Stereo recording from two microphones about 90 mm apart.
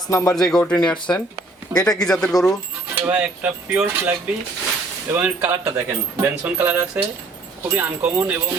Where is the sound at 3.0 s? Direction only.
15° right (ahead or behind).